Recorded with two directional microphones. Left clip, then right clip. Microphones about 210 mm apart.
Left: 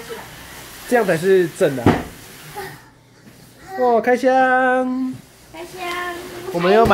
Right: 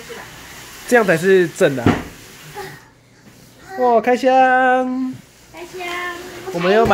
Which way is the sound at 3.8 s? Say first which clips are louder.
Right 1 dB; 10° right (ahead or behind).